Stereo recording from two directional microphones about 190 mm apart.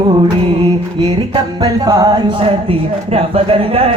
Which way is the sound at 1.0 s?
25° right (ahead or behind).